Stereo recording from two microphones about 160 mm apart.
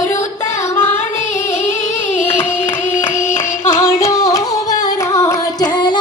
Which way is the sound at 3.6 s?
15° left (ahead or behind).